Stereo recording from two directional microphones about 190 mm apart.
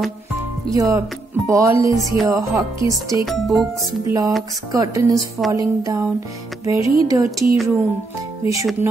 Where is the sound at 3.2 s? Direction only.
Centre (ahead or behind).